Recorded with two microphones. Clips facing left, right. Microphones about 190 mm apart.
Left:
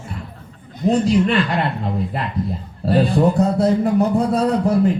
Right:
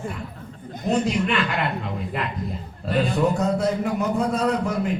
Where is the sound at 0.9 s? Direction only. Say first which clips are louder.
Left 6 dB; 35° left (ahead or behind).